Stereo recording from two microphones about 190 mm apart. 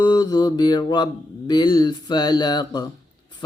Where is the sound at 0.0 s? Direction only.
20° left (ahead or behind).